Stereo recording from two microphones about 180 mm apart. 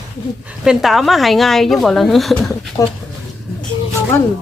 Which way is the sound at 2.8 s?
20° left (ahead or behind).